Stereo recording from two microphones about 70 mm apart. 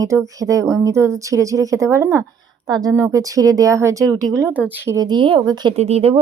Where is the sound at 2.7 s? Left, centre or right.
Right.